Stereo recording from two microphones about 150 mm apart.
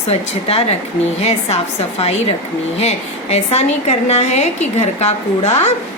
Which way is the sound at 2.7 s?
45° left (ahead or behind).